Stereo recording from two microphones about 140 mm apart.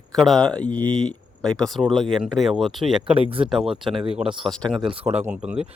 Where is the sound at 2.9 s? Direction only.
40° right (ahead or behind).